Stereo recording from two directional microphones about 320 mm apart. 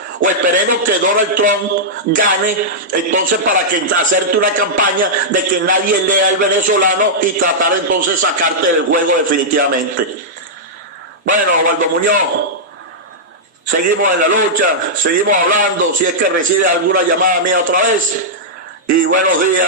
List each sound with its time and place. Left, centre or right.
0.2 s a man's voice: right
11.3 s a man's voice: right
13.7 s a man's voice: right